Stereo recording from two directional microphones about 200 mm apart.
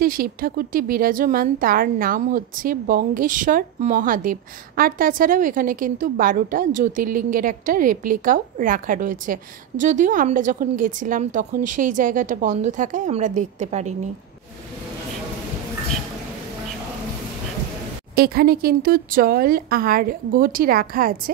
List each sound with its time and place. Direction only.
0.0 s speech: 45° right (ahead or behind)
18.1 s speech: 50° right (ahead or behind)